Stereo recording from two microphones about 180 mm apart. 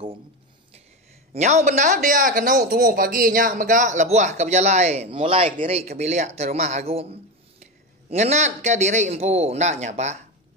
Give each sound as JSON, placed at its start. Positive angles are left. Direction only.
{"t": 1.3, "sound": "speech", "side_deg": -40}